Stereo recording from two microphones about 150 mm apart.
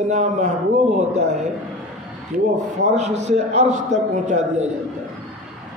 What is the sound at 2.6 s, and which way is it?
Speech, 50° right (ahead or behind).